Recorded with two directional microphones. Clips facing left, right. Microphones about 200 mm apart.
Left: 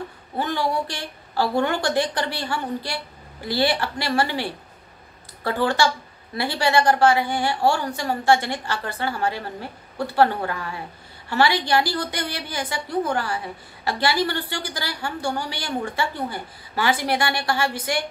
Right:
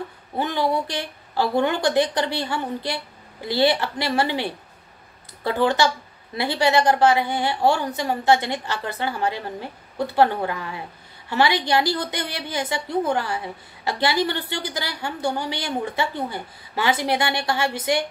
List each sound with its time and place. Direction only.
0.4 s a woman's voice: 20° right (ahead or behind)